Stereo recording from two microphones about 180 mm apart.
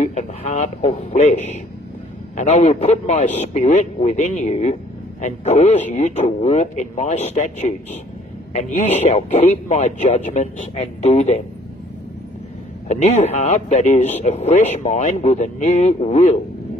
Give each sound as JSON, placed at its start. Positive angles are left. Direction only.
{"t": 0.0, "sound": "a man's voice", "side_deg": 40}
{"t": 12.8, "sound": "a man's voice", "side_deg": 40}